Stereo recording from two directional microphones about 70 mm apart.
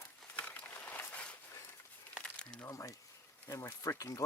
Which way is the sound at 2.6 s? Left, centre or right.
Left.